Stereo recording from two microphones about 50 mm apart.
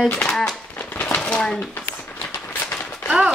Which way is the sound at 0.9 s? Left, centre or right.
Left.